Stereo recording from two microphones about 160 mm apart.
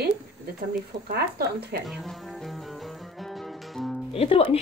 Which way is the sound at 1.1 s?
90° right.